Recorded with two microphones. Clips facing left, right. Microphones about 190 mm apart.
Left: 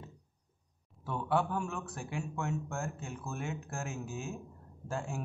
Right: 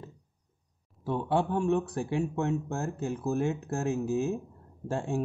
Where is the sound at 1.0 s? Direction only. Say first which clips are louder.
Right 4 dB; 30° right (ahead or behind).